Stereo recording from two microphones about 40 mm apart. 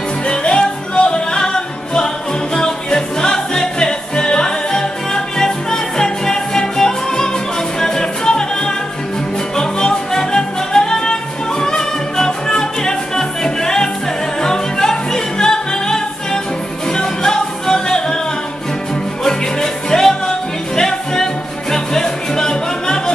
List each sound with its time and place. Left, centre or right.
0.3 s music: left
19.2 s music: centre